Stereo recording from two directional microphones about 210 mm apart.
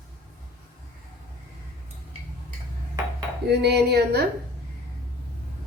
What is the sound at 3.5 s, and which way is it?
Speech, 50° right (ahead or behind).